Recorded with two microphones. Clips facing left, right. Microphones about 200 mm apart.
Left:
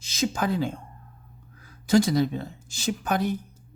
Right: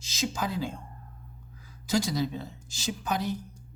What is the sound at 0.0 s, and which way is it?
Speech, 55° left (ahead or behind).